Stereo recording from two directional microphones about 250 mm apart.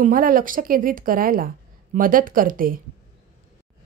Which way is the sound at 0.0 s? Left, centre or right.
Right.